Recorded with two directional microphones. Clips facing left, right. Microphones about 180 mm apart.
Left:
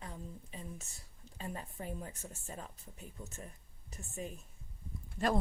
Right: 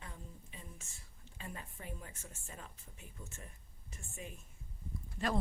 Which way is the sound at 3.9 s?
40° left (ahead or behind).